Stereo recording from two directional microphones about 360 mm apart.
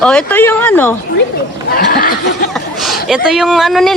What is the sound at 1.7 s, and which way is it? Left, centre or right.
Speech, left.